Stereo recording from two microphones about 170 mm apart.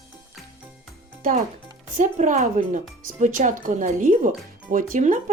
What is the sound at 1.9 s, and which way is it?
A woman's voice, 45° right (ahead or behind).